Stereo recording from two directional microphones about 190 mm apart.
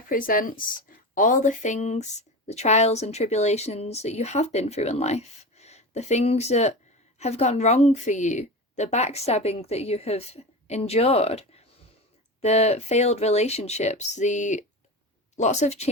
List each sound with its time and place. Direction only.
0.1 s a woman's voice: 45° left (ahead or behind)